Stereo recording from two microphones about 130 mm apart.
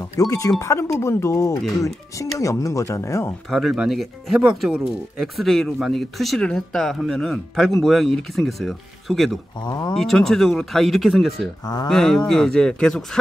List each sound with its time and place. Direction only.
0.0 s speech: 25° left (ahead or behind)
3.4 s speech: centre (ahead or behind)
9.7 s speech: 30° left (ahead or behind)
9.9 s speech: centre (ahead or behind)
11.6 s speech: 30° left (ahead or behind)
11.9 s speech: 5° left (ahead or behind)